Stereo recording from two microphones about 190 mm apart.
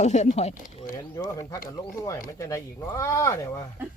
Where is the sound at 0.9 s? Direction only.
15° left (ahead or behind).